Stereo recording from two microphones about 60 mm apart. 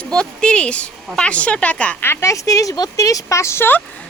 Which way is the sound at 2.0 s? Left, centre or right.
Left.